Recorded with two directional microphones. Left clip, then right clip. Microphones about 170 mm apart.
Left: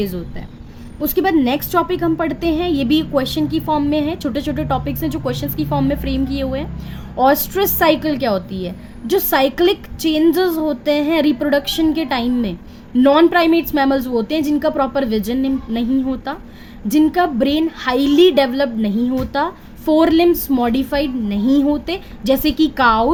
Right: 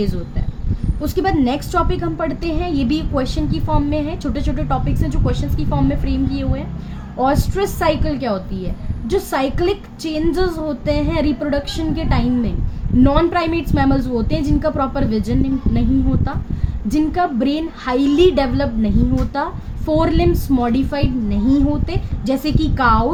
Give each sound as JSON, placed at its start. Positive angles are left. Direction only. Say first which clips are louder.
{"t": 1.0, "sound": "a woman's voice", "louder": "left 2 dB", "side_deg": 30}
{"t": 16.9, "sound": "a woman's voice", "louder": "left 3 dB", "side_deg": 35}